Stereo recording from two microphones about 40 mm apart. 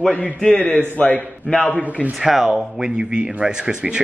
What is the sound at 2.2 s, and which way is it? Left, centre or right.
Speech, centre.